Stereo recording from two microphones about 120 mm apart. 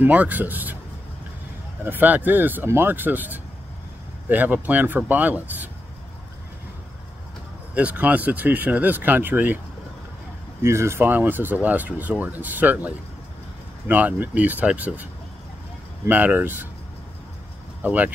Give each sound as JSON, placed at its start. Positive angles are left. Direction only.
{"t": 0.0, "sound": "speech", "side_deg": -15}
{"t": 1.9, "sound": "speech", "side_deg": -15}
{"t": 7.7, "sound": "speech", "side_deg": -10}
{"t": 10.6, "sound": "speech", "side_deg": -20}
{"t": 16.1, "sound": "speech", "side_deg": -15}
{"t": 17.8, "sound": "speech", "side_deg": -15}